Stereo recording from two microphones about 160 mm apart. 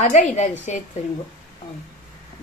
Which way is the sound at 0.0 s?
50° left (ahead or behind).